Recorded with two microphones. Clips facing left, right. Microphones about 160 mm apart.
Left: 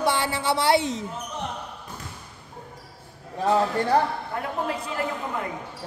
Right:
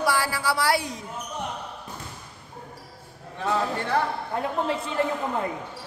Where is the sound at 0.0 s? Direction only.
25° left (ahead or behind).